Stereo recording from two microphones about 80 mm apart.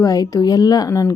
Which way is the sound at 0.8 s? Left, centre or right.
Left.